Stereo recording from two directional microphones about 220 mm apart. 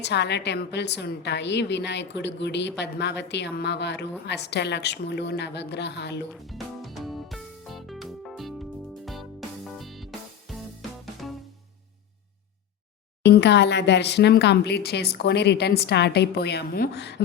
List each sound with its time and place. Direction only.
0.0 s a woman's voice: 50° left (ahead or behind)
6.4 s music: centre (ahead or behind)
13.2 s a woman's voice: 50° left (ahead or behind)